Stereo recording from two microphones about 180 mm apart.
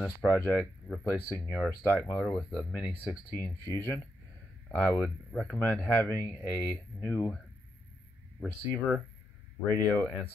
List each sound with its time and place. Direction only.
0.3 s speech: 10° left (ahead or behind)
8.4 s speech: 5° left (ahead or behind)